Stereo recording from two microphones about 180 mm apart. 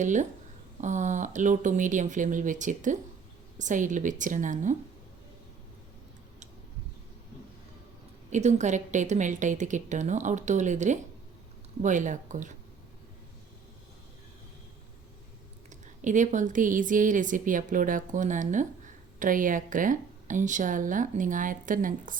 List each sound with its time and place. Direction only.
0.0 s speech: 45° right (ahead or behind)
8.3 s a woman's voice: 40° right (ahead or behind)
15.7 s speech: 45° right (ahead or behind)